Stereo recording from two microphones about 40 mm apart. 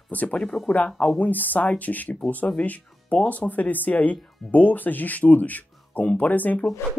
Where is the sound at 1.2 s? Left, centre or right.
Left.